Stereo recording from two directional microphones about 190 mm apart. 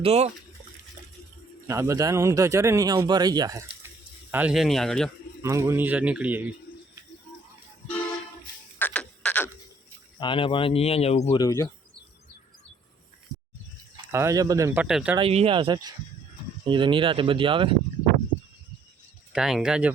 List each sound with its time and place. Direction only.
0.0 s speech: 35° right (ahead or behind)
1.6 s a man's voice: 15° right (ahead or behind)
4.3 s speech: 5° right (ahead or behind)
5.4 s a man's voice: 15° right (ahead or behind)
8.8 s a sound: 5° left (ahead or behind)
10.2 s speech: 25° left (ahead or behind)
11.3 s speech: 15° left (ahead or behind)
13.9 s speech: 15° right (ahead or behind)
15.2 s speech: 30° right (ahead or behind)
19.3 s speech: 5° right (ahead or behind)